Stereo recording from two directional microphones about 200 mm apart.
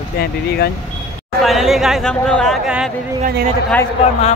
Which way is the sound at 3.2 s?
50° right (ahead or behind).